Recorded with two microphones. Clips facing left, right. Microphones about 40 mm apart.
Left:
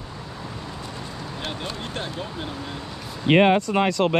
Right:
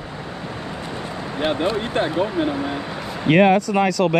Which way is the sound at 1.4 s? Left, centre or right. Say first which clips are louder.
Right 12 dB; right.